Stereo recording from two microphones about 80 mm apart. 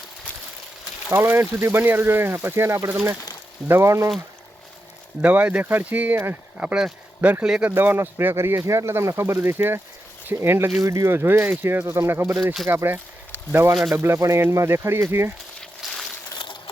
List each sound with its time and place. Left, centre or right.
1.1 s speech: right
5.2 s speech: centre
6.6 s speech: centre
7.2 s speech: centre
15.8 s a sound: centre
16.3 s a sound: left